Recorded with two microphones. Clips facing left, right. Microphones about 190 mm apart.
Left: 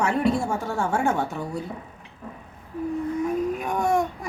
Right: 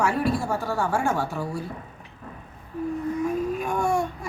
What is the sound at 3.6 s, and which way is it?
Baby cry, 20° left (ahead or behind).